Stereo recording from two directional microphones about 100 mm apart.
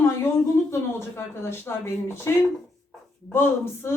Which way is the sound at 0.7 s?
25° left (ahead or behind).